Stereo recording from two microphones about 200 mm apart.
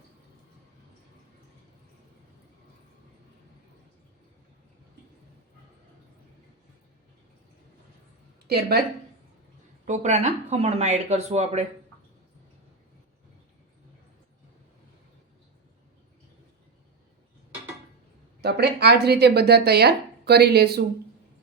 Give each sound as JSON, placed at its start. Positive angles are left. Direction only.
{"t": 8.4, "sound": "speech", "side_deg": -50}
{"t": 9.8, "sound": "speech", "side_deg": -35}
{"t": 18.4, "sound": "speech", "side_deg": -55}